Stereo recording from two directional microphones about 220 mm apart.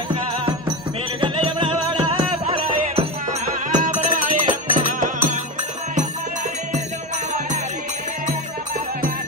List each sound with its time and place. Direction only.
1.2 s music: 20° right (ahead or behind)
3.7 s music: 35° right (ahead or behind)